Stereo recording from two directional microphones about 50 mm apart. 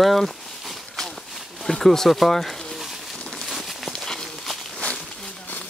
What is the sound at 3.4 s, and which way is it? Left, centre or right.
Walk, centre.